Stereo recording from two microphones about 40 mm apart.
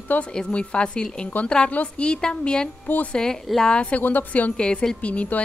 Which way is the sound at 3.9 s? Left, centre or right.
Left.